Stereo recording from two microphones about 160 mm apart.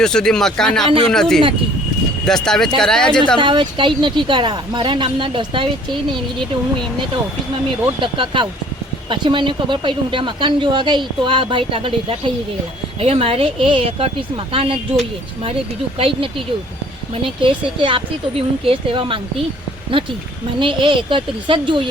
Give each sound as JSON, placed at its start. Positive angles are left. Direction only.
{"t": 0.0, "sound": "speech", "side_deg": 5}
{"t": 3.4, "sound": "speech", "side_deg": -30}
{"t": 8.0, "sound": "speech", "side_deg": -30}
{"t": 16.0, "sound": "speech", "side_deg": -35}